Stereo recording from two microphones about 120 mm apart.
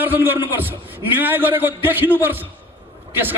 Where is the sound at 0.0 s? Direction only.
15° right (ahead or behind).